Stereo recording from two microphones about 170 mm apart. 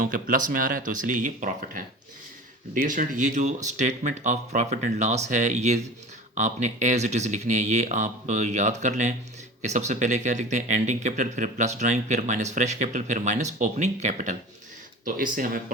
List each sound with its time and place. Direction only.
0.0 s speech: 55° right (ahead or behind)